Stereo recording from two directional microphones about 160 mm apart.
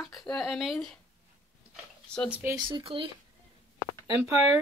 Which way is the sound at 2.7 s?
30° right (ahead or behind).